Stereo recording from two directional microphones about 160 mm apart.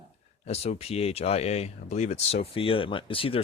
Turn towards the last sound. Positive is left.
turn(degrees=35)  # may be behind; listen again after turning